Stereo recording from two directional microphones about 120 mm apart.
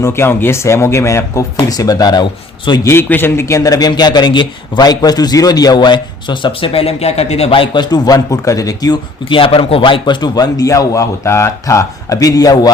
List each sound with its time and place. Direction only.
0.0 s speech: 20° left (ahead or behind)
2.8 s a man's voice: 20° left (ahead or behind)
9.3 s a man's voice: 45° left (ahead or behind)